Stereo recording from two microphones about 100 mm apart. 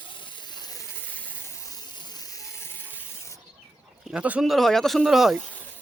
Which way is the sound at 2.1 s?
35° left (ahead or behind).